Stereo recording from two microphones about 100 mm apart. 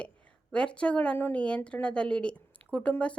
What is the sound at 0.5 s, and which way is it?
A woman's voice, 10° left (ahead or behind).